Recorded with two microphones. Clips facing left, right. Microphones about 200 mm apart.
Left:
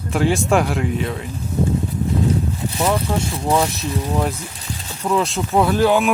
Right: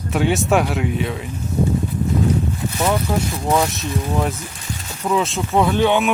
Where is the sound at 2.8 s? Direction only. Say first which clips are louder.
Even; centre (ahead or behind).